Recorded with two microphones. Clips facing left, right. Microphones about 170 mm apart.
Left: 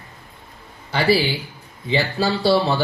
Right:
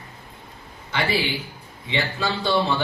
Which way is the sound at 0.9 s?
35° left (ahead or behind).